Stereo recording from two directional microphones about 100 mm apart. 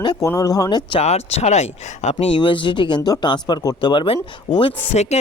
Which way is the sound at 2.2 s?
60° left (ahead or behind).